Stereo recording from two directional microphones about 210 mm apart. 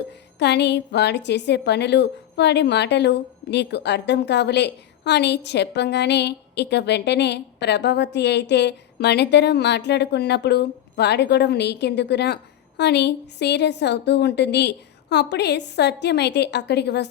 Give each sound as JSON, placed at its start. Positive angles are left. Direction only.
{"t": 0.3, "sound": "a woman's voice", "side_deg": 55}